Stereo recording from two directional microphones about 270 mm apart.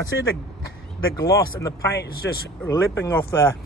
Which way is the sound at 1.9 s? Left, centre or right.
Left.